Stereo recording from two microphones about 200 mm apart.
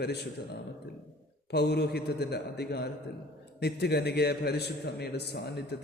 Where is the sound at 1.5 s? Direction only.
55° left (ahead or behind).